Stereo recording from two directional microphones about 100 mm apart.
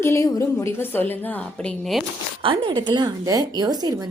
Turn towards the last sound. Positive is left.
turn(degrees=-45)  # may be behind; listen again after turning